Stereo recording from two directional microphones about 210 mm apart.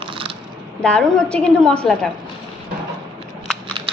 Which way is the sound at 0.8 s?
5° left (ahead or behind).